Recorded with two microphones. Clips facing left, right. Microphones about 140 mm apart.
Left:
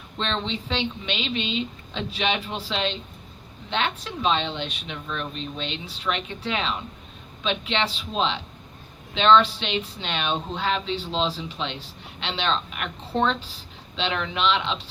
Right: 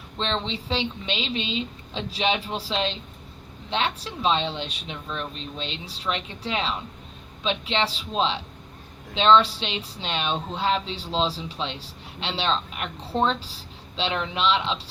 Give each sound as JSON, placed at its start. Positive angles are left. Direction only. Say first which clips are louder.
{"t": 0.4, "sound": "speech", "louder": "even", "side_deg": -35}